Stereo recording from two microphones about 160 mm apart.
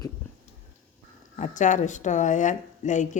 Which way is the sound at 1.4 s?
50° left (ahead or behind).